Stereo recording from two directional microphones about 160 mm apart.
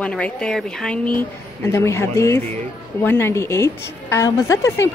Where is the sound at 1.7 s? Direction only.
20° left (ahead or behind).